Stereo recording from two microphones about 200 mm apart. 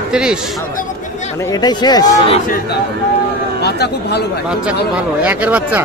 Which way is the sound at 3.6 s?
55° left (ahead or behind).